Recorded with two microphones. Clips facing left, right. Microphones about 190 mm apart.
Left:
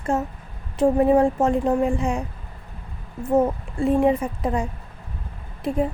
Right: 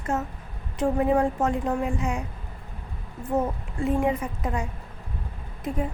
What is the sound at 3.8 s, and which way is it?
Speech, 30° left (ahead or behind).